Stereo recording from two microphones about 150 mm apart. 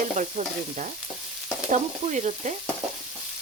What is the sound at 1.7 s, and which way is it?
Stir, 55° right (ahead or behind).